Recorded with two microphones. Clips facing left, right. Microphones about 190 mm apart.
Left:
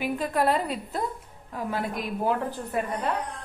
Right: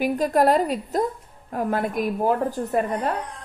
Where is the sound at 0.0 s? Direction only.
40° right (ahead or behind).